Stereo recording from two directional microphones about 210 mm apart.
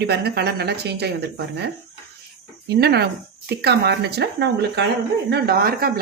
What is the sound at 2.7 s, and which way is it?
Speech, 50° right (ahead or behind).